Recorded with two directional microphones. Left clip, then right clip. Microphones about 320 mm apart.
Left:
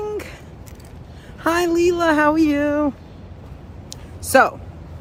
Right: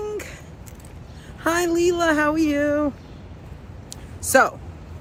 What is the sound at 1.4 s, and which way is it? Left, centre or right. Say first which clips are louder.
A woman's voice: left 3 dB; centre.